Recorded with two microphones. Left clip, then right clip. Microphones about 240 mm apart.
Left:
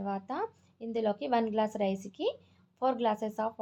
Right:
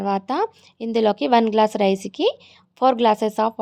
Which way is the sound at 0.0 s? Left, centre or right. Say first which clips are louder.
Right 13 dB; right.